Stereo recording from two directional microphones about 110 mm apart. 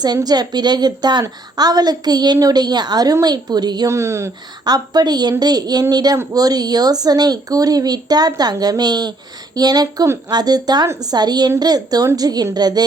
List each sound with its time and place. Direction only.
0.0 s speech: 35° right (ahead or behind)
3.8 s speech: 25° right (ahead or behind)
4.6 s speech: 40° right (ahead or behind)